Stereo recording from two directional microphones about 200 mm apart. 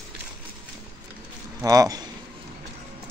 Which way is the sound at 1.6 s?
15° right (ahead or behind).